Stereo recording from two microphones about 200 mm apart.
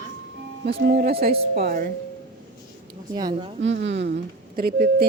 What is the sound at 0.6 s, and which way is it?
Speech, 45° right (ahead or behind).